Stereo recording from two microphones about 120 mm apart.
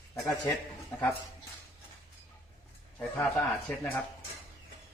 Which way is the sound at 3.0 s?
10° left (ahead or behind).